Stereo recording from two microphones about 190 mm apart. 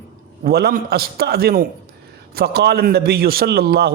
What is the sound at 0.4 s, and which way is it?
A man's voice, 55° right (ahead or behind).